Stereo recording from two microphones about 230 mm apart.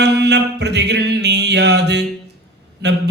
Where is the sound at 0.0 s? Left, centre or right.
Right.